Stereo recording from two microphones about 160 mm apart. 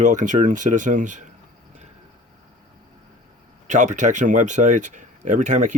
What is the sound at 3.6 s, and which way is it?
Speech, 50° right (ahead or behind).